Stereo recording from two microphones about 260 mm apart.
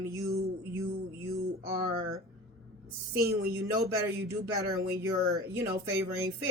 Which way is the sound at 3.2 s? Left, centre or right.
Right.